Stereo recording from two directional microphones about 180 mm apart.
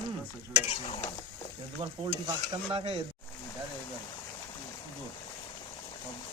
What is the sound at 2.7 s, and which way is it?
Speech, 35° right (ahead or behind).